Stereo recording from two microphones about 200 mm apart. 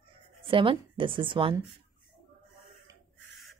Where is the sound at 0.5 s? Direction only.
25° right (ahead or behind).